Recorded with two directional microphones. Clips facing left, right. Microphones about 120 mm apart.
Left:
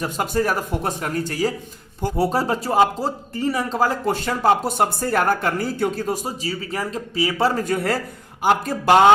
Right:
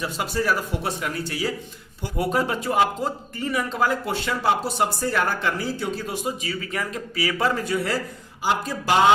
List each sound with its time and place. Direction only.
0.0 s speech: 45° left (ahead or behind)
2.1 s speech: 35° left (ahead or behind)
7.5 s speech: 50° left (ahead or behind)